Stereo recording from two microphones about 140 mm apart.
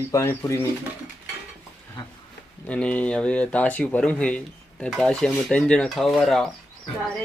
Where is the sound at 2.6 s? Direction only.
10° left (ahead or behind).